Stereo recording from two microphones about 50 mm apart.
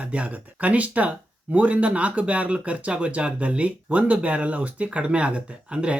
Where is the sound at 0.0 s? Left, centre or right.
Right.